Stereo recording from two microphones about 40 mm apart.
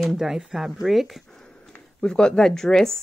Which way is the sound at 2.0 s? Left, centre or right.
Centre.